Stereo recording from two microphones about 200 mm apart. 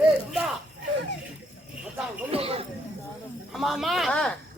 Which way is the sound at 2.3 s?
30° right (ahead or behind).